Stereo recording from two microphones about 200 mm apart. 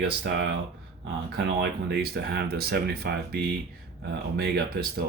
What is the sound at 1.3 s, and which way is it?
Speech, 55° right (ahead or behind).